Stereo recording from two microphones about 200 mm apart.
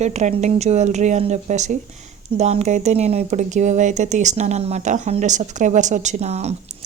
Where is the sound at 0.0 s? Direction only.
35° right (ahead or behind).